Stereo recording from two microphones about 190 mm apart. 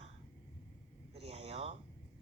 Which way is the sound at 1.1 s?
35° right (ahead or behind).